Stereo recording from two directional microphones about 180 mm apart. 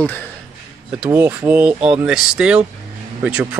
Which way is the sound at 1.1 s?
15° right (ahead or behind).